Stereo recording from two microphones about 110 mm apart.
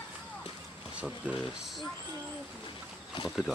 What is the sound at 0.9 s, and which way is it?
Speech, 10° right (ahead or behind).